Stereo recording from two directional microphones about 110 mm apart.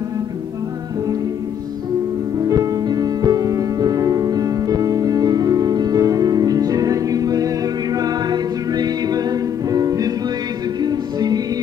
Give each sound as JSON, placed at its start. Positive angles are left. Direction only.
{"t": 2.4, "sound": "music", "side_deg": -35}